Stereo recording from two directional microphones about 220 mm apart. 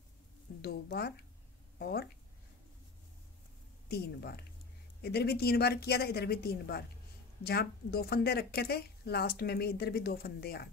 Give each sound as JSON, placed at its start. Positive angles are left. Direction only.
{"t": 0.6, "sound": "speech", "side_deg": 45}
{"t": 3.9, "sound": "speech", "side_deg": 45}